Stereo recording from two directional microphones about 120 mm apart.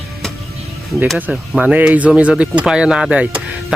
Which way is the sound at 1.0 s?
5° right (ahead or behind).